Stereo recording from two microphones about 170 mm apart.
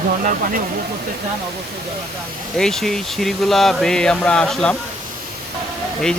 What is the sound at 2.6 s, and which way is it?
Speech, centre (ahead or behind).